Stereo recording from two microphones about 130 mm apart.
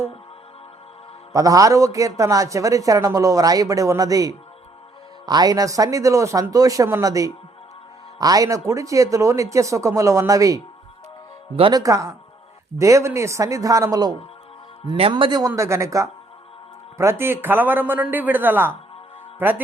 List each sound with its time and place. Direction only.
1.3 s a man's voice: 25° right (ahead or behind)
11.7 s a man's voice: 25° right (ahead or behind)
14.8 s a man's voice: 50° right (ahead or behind)
15.1 s a man's voice: 35° right (ahead or behind); by 19.6 s 15° right (ahead or behind)